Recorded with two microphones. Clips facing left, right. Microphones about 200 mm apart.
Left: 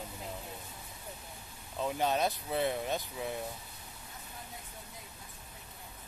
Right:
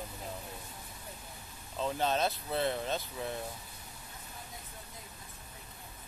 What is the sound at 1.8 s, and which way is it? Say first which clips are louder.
Speech: even; 15° left (ahead or behind).